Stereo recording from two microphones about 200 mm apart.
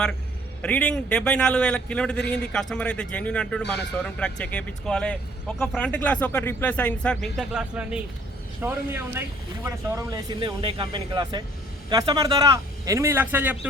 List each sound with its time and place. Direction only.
0.6 s a man's voice: 5° left (ahead or behind)